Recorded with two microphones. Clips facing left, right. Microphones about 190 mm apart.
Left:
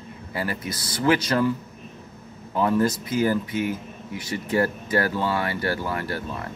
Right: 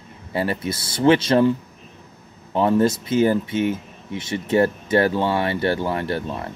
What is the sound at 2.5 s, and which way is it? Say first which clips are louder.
Speech: right 4 dB; 25° right (ahead or behind).